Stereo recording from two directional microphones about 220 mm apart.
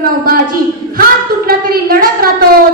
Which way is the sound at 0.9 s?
40° right (ahead or behind).